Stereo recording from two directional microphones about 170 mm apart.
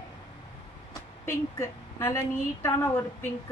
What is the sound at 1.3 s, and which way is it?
A woman's voice, 15° left (ahead or behind).